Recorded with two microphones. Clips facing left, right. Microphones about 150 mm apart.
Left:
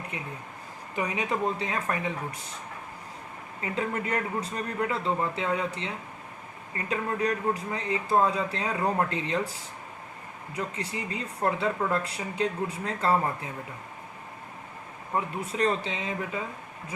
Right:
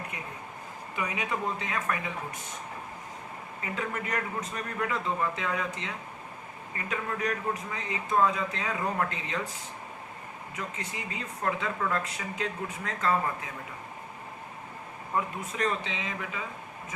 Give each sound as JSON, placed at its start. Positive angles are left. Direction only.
{"t": 0.9, "sound": "speech", "side_deg": 35}
{"t": 3.6, "sound": "speech", "side_deg": 30}
{"t": 10.8, "sound": "speech", "side_deg": 35}
{"t": 15.1, "sound": "speech", "side_deg": 30}